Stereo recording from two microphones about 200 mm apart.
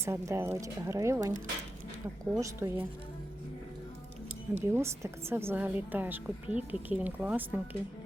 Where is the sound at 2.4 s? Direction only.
15° right (ahead or behind).